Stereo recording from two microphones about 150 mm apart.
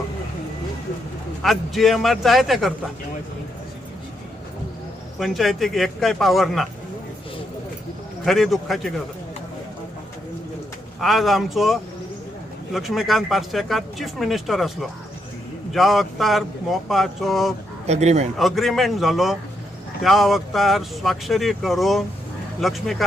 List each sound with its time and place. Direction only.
1.4 s speech: centre (ahead or behind)
5.2 s speech: centre (ahead or behind)
8.2 s speech: centre (ahead or behind)
11.0 s speech: centre (ahead or behind)
17.8 s a man's voice: 45° right (ahead or behind)
18.3 s speech: centre (ahead or behind)